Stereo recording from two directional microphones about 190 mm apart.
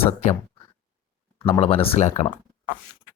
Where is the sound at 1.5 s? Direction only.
30° left (ahead or behind).